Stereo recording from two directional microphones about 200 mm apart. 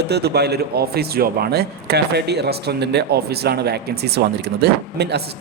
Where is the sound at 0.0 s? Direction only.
55° right (ahead or behind).